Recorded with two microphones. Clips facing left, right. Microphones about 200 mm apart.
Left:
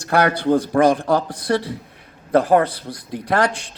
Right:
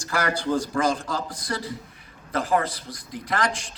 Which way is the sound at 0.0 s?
60° left (ahead or behind).